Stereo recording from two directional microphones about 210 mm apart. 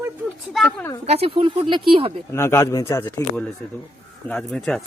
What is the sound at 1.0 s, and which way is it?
Speech, 30° right (ahead or behind).